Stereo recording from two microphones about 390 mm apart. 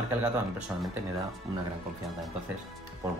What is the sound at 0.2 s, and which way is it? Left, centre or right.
Speech, centre.